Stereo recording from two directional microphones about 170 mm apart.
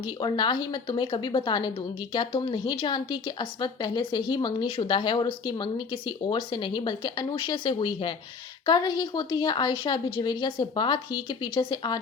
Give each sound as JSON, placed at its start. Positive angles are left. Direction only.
{"t": 0.0, "sound": "a woman's voice", "side_deg": 25}